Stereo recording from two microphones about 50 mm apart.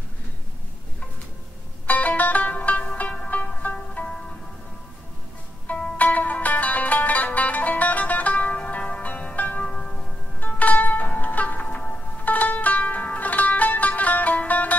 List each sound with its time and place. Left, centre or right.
1.9 s music: left
5.9 s music: left
9.6 s music: centre
10.4 s zither: left